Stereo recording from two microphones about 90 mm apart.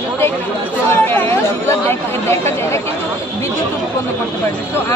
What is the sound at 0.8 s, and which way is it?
Speech, 25° left (ahead or behind).